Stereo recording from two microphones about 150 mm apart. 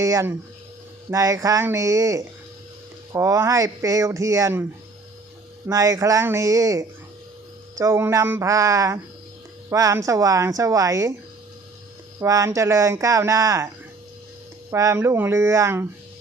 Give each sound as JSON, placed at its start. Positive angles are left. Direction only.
{"t": 0.0, "sound": "speech", "side_deg": -20}
{"t": 5.7, "sound": "speech", "side_deg": -20}
{"t": 12.2, "sound": "speech", "side_deg": -20}
{"t": 14.7, "sound": "speech", "side_deg": -20}